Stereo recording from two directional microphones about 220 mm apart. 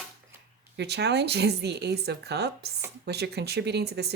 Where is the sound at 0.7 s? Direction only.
50° right (ahead or behind).